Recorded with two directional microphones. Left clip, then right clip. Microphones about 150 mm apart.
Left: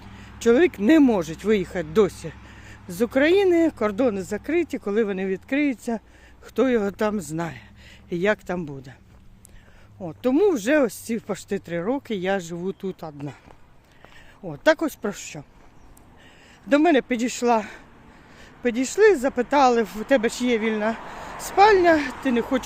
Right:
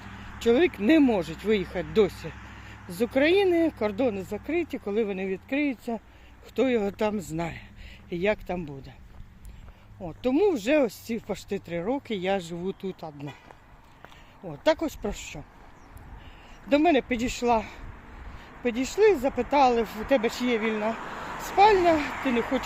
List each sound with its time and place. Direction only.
0.5 s speech: 35° left (ahead or behind)
3.0 s speech: 35° left (ahead or behind); by 6.0 s 55° left (ahead or behind)
6.6 s speech: 30° left (ahead or behind)
8.1 s speech: 40° left (ahead or behind)
10.0 s speech: 35° left (ahead or behind)
13.0 s speech: 45° left (ahead or behind)
14.4 s speech: 40° left (ahead or behind)
16.6 s speech: 40° left (ahead or behind)